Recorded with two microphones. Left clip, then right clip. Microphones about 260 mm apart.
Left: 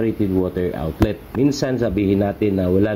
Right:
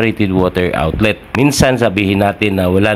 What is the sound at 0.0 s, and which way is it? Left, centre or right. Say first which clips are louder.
Speech: right 6 dB; right.